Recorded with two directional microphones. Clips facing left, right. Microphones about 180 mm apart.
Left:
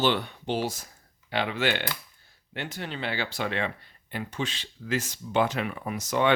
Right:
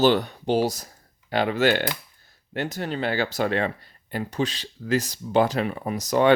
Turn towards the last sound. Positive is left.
turn(degrees=-40)  # may be behind; listen again after turning